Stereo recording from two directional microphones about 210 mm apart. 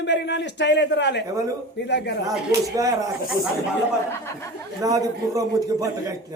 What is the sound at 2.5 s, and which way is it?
Speech, 15° right (ahead or behind).